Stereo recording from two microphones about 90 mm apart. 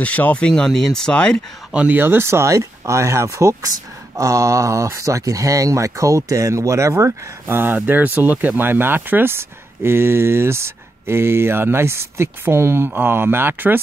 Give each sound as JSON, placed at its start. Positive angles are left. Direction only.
{"t": 0.0, "sound": "speech", "side_deg": 15}
{"t": 1.7, "sound": "speech", "side_deg": -10}
{"t": 2.0, "sound": "speech", "side_deg": -25}